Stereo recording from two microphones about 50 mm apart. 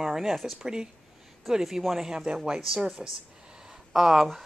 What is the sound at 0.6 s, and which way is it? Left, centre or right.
Speech, centre.